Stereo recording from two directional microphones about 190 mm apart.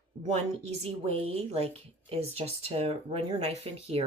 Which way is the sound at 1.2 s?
35° right (ahead or behind).